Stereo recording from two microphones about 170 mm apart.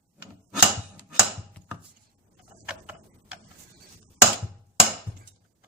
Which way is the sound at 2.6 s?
5° right (ahead or behind).